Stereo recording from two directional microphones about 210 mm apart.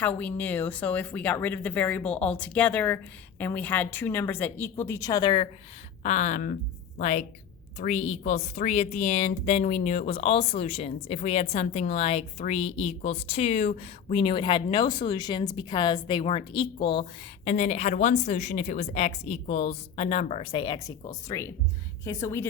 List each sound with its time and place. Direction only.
0.2 s speech: 5° left (ahead or behind); by 5.5 s 20° left (ahead or behind)
6.0 s a woman's voice: 35° left (ahead or behind); by 22.4 s 15° left (ahead or behind)